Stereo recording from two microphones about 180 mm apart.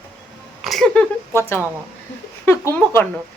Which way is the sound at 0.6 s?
Centre (ahead or behind).